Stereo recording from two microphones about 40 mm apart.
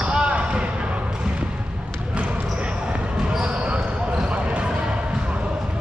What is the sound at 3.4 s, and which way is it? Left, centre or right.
Basketball bounce, right.